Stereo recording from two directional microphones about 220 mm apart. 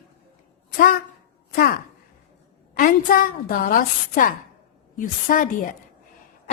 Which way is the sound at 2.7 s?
40° left (ahead or behind).